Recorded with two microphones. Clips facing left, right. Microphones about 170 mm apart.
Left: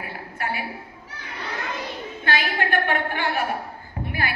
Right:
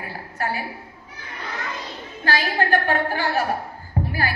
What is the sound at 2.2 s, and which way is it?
A woman's voice, 40° right (ahead or behind).